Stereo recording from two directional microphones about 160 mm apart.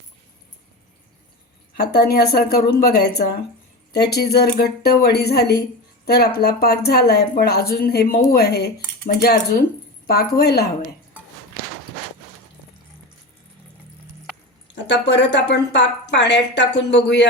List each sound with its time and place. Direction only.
1.7 s a woman's voice: 75° left (ahead or behind)
8.3 s speech: 80° left
9.0 s a woman's voice: 70° left (ahead or behind)
14.8 s a woman's voice: 90° left